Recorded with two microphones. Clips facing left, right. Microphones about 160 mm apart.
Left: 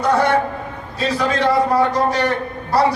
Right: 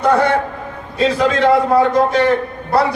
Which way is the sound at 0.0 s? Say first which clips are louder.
Right 3 dB; 55° right (ahead or behind).